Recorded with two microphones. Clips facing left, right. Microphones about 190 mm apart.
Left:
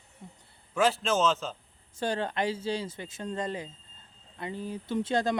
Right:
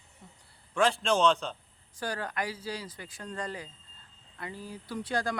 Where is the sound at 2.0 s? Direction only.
25° left (ahead or behind).